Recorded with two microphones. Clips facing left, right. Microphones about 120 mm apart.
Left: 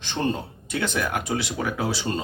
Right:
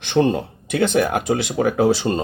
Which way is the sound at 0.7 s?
55° right (ahead or behind).